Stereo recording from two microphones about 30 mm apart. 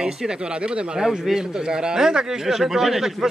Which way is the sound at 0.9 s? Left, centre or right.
Centre.